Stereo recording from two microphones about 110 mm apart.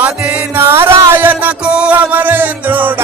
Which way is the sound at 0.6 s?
20° right (ahead or behind).